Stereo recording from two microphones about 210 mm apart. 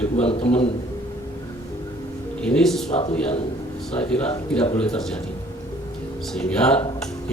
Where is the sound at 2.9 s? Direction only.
30° left (ahead or behind).